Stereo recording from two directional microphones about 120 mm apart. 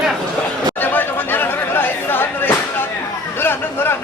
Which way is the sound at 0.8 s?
15° left (ahead or behind).